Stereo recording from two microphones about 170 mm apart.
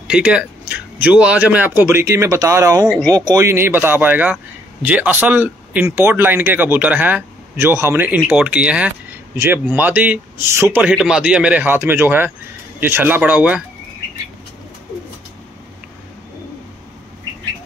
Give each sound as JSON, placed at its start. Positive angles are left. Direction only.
{"t": 0.1, "sound": "speech", "side_deg": -5}